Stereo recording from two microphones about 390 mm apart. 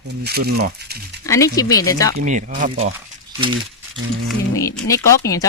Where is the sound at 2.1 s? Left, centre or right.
Centre.